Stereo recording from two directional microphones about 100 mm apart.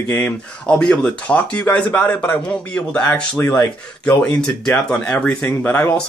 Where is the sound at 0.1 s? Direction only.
15° left (ahead or behind).